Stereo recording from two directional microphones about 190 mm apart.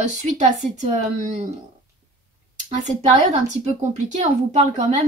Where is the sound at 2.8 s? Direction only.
40° right (ahead or behind).